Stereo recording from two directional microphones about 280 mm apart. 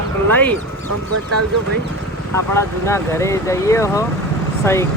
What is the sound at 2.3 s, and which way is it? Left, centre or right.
Speech, centre.